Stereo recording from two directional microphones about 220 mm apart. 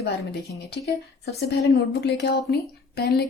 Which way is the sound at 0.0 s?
50° left (ahead or behind).